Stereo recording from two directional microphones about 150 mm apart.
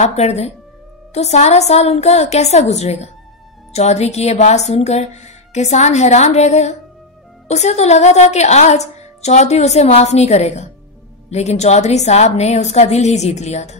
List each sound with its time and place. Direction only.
0.0 s a woman's voice: 45° left (ahead or behind)